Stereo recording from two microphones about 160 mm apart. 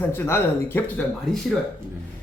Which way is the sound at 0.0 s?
15° left (ahead or behind).